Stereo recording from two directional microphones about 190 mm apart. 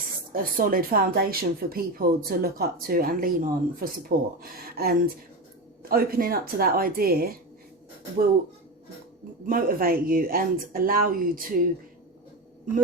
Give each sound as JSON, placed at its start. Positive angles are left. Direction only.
{"t": 0.3, "sound": "speech", "side_deg": -50}
{"t": 9.5, "sound": "speech", "side_deg": -50}